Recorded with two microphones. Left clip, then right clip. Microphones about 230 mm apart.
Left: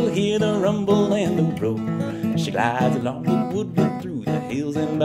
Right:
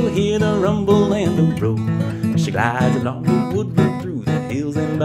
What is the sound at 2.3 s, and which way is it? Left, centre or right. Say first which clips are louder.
Speech: right 2 dB; centre.